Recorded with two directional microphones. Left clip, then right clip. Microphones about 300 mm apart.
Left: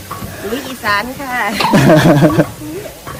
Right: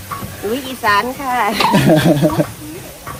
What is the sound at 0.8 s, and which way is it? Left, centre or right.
Speech, centre.